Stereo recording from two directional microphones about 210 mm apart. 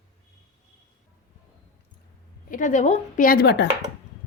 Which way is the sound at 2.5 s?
40° left (ahead or behind).